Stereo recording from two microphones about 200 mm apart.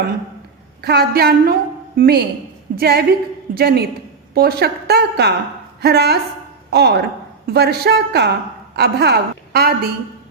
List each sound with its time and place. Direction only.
0.8 s a woman's voice: 55° right (ahead or behind)